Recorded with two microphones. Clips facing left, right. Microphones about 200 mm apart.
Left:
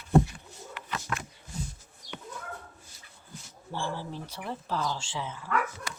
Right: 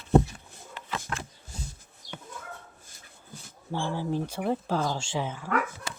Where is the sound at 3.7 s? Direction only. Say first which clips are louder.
Right 5 dB; 50° right (ahead or behind).